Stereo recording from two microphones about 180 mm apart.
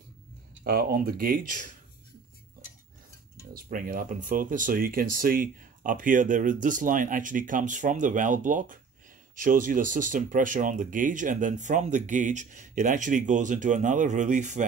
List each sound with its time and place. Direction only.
0.7 s speech: 55° right (ahead or behind)
3.5 s speech: 55° right (ahead or behind)